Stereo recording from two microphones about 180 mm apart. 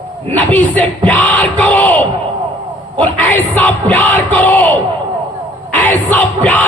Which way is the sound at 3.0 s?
10° left (ahead or behind).